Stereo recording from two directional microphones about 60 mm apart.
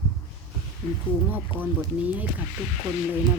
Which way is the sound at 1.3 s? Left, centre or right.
Right.